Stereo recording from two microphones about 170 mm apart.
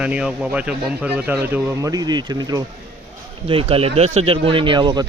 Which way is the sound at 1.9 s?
25° right (ahead or behind).